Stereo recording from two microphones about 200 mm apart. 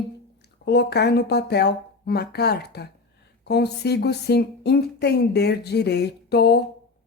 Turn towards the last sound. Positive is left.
turn(degrees=55)  # may be behind; listen again after turning